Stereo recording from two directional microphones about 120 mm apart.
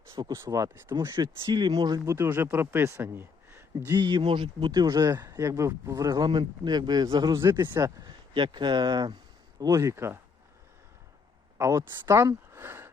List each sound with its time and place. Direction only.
0.2 s speech: 25° right (ahead or behind)
2.1 s speech: 20° right (ahead or behind)
4.0 s speech: 45° right (ahead or behind)
7.3 s speech: 25° right (ahead or behind)
8.0 s speech: 40° right (ahead or behind); by 10.2 s 20° right (ahead or behind)
11.5 s speech: 25° right (ahead or behind)